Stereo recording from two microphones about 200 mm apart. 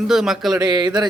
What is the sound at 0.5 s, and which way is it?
Speech, 20° right (ahead or behind).